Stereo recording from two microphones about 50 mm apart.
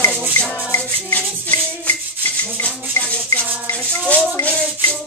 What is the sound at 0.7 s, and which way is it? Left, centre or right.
Music, left.